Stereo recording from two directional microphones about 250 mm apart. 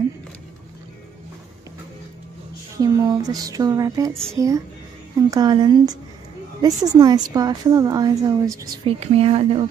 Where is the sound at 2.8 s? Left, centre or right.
Centre.